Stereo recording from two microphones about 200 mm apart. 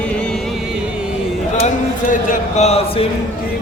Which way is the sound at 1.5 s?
35° left (ahead or behind).